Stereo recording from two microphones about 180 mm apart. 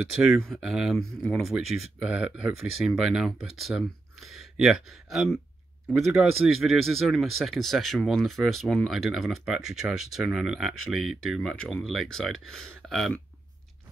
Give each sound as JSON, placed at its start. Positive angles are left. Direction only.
{"t": 0.4, "sound": "speech", "side_deg": 0}
{"t": 1.6, "sound": "speech", "side_deg": -35}
{"t": 2.0, "sound": "speech", "side_deg": -5}